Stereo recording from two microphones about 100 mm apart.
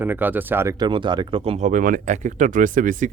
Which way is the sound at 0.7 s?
50° right (ahead or behind).